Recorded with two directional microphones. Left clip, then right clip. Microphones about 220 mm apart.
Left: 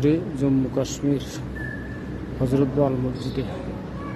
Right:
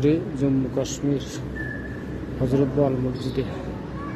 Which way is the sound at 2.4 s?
25° left (ahead or behind).